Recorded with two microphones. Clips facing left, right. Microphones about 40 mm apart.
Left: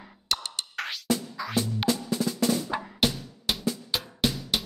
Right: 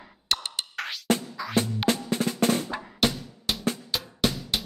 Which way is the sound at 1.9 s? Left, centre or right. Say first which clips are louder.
Right 1 dB; right.